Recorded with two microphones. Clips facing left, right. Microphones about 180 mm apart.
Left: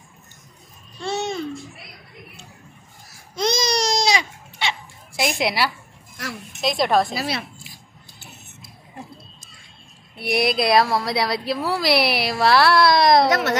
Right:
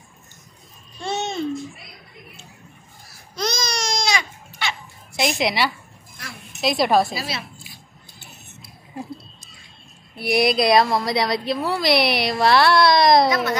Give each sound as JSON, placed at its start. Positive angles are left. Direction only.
{"t": 1.0, "sound": "babbling", "side_deg": -20}
{"t": 3.3, "sound": "baby cry", "side_deg": 30}
{"t": 5.1, "sound": "a woman's voice", "side_deg": 5}
{"t": 7.2, "sound": "speech", "side_deg": 55}
{"t": 10.1, "sound": "a woman's voice", "side_deg": 0}
{"t": 13.3, "sound": "a woman's voice", "side_deg": 80}